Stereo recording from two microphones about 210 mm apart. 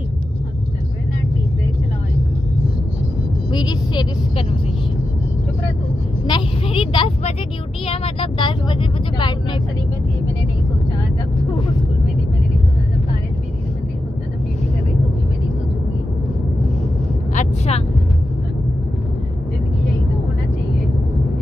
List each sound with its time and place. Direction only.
3.5 s speech: 20° left (ahead or behind)
6.2 s speech: 25° left (ahead or behind)
17.3 s vehicle: 35° left (ahead or behind)